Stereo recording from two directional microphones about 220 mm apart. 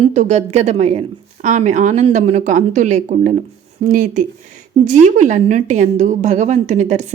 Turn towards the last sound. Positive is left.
turn(degrees=-30)  # may be behind; listen again after turning